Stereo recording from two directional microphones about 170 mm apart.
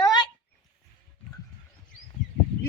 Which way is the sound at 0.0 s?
25° left (ahead or behind).